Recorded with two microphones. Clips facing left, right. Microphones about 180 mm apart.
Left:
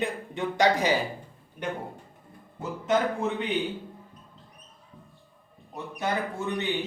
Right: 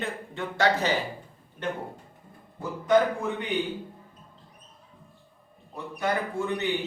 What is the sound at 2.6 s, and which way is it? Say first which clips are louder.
Speech: right 3 dB; 25° left (ahead or behind).